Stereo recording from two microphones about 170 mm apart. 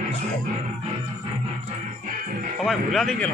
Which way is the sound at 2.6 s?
Centre (ahead or behind).